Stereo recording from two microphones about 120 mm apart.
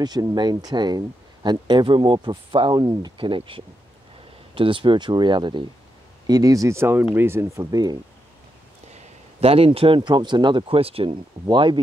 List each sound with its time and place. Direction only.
0.0 s speech: 35° right (ahead or behind)
6.2 s speech: 30° right (ahead or behind)
8.9 s a man's voice: 55° right (ahead or behind)
11.4 s speech: 40° right (ahead or behind)